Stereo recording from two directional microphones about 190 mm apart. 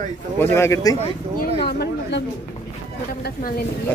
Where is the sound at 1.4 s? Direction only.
55° left (ahead or behind).